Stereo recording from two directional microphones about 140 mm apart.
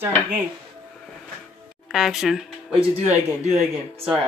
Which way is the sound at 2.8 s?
55° right (ahead or behind).